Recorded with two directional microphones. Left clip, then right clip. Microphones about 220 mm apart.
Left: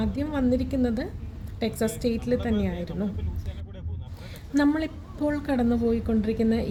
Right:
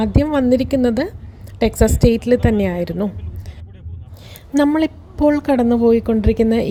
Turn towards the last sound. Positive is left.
turn(degrees=-30)  # may be behind; listen again after turning